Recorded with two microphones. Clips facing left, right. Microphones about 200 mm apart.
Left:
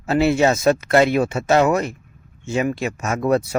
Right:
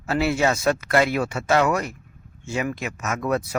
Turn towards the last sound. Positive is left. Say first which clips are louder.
# left 5 dB
turn(degrees=30)  # may be behind; listen again after turning